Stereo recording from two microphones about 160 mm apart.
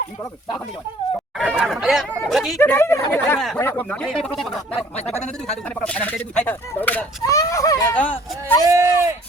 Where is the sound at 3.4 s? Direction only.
Centre (ahead or behind).